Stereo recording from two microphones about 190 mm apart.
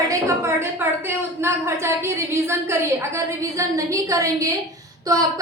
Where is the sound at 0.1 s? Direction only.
15° right (ahead or behind).